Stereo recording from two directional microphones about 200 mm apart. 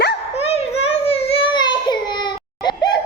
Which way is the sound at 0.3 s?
30° left (ahead or behind).